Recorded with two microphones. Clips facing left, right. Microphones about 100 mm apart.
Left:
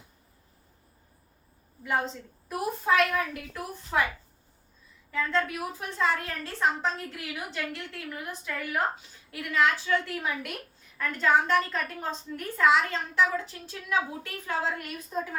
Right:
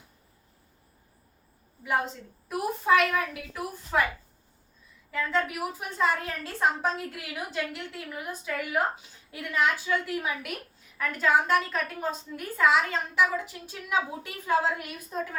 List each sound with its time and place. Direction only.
2.5 s a woman's voice: centre (ahead or behind)
5.1 s a woman's voice: 5° right (ahead or behind)